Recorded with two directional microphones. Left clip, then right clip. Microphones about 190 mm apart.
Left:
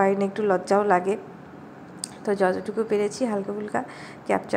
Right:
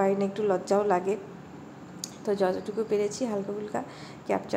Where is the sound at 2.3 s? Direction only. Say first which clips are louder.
Left 4 dB; 10° left (ahead or behind).